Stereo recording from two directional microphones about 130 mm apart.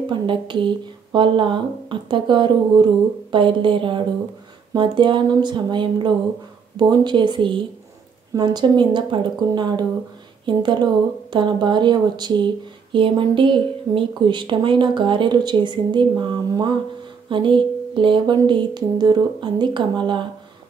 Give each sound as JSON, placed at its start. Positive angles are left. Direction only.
{"t": 0.1, "sound": "speech", "side_deg": -40}